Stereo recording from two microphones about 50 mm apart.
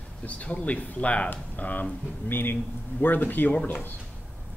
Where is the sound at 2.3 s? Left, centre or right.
Left.